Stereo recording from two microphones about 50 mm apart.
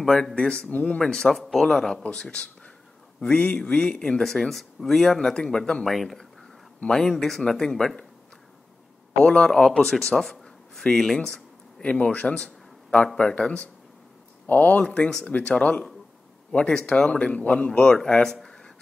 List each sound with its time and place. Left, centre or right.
0.0 s speech: centre
0.4 s speech: left
1.0 s speech: centre
3.2 s speech: centre
5.9 s speech: centre
9.1 s speech: left
11.2 s a sound: centre
13.2 s speech: left
17.9 s speech: centre